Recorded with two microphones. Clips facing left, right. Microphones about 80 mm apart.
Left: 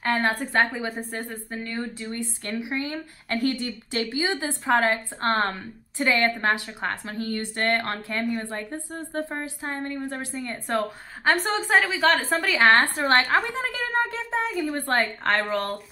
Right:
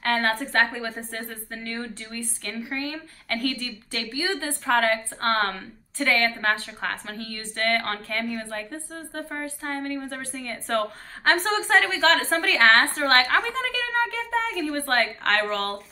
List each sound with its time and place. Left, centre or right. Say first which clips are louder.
0.0 s a woman's voice: even; centre
2.1 s speech: left 1 dB; centre
11.3 s a woman's voice: right 1 dB; centre
14.5 s a woman's voice: left 1 dB; centre
14.8 s a woman's voice: right 2 dB; centre